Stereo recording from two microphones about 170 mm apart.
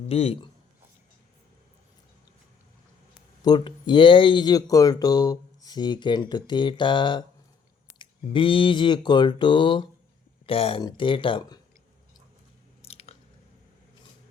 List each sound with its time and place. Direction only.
0.1 s a man's voice: 35° left (ahead or behind)
3.4 s speech: 25° left (ahead or behind)
12.8 s biting: 35° left (ahead or behind)